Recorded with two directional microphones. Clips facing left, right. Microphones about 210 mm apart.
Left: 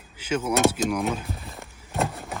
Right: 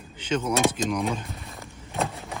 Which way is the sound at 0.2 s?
10° left (ahead or behind).